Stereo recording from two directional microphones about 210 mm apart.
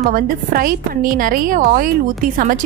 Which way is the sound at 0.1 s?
45° right (ahead or behind).